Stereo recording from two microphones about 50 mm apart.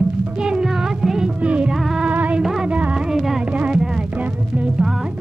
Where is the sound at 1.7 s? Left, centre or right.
Centre.